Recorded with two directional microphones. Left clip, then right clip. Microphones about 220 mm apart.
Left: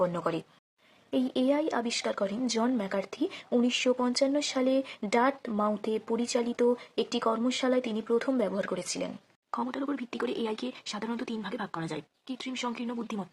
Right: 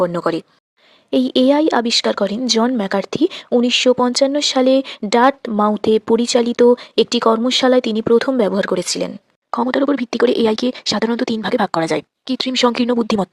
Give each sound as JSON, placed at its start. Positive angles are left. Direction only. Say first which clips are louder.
{"t": 0.0, "sound": "speech", "louder": "right 11 dB", "side_deg": -35}